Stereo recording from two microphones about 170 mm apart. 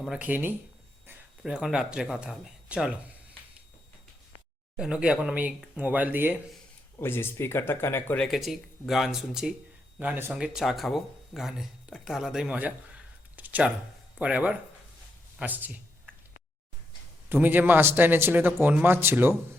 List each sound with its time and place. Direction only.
0.0 s a man's voice: 5° right (ahead or behind)
4.8 s a man's voice: 5° right (ahead or behind)
7.0 s speech: 15° left (ahead or behind); by 12.7 s 10° right (ahead or behind)
13.3 s a sound: 10° right (ahead or behind)
14.2 s a man's voice: 5° right (ahead or behind)
17.2 s a man's voice: 10° right (ahead or behind)